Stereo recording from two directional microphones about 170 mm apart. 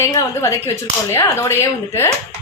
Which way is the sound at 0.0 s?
15° left (ahead or behind).